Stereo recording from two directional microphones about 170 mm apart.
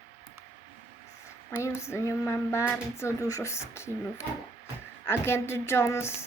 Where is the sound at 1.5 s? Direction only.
15° left (ahead or behind).